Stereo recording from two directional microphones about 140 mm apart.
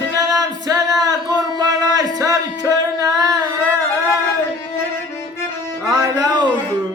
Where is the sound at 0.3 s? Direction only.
30° right (ahead or behind).